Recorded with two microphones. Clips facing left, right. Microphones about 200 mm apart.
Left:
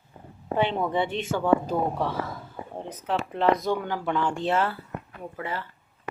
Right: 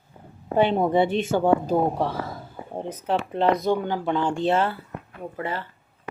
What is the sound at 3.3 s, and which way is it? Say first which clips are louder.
Speech: right 2 dB; 25° right (ahead or behind).